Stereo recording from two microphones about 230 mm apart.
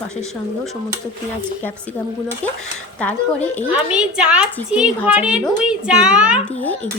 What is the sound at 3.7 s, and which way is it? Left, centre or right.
Speech, centre.